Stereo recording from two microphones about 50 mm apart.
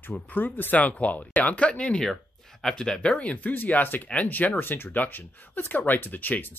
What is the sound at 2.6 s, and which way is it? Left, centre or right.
Speech, centre.